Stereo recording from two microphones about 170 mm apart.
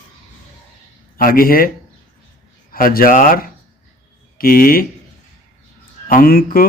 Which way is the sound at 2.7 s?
55° left (ahead or behind).